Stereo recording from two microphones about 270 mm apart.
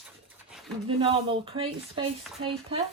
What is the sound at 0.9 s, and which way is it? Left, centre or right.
Speech, centre.